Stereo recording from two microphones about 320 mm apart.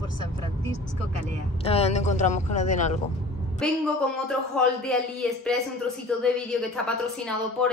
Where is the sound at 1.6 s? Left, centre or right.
Centre.